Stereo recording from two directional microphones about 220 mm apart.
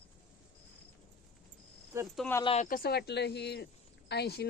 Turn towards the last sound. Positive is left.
turn(degrees=50)  # may be behind; listen again after turning